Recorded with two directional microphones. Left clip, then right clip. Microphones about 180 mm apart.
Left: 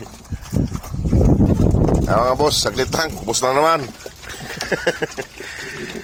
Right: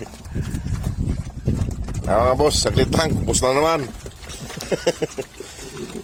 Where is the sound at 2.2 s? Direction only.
25° right (ahead or behind).